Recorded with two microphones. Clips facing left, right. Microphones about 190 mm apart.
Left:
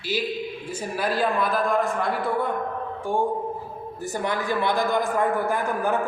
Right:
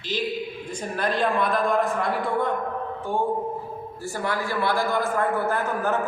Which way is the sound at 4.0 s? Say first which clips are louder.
Left 1 dB; 20° left (ahead or behind).